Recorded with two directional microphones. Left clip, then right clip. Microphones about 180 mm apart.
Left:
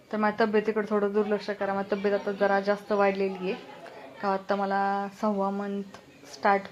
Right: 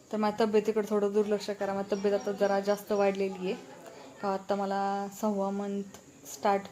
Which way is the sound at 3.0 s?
10° right (ahead or behind).